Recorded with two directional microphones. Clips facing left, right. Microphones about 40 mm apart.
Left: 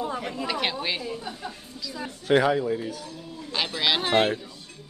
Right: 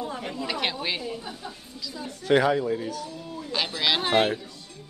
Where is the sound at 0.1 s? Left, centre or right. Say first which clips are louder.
Left 2 dB; left.